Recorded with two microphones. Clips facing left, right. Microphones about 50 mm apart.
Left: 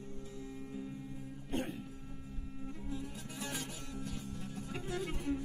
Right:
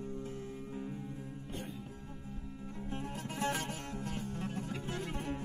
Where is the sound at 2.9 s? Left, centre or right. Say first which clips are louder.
Right 5 dB; right.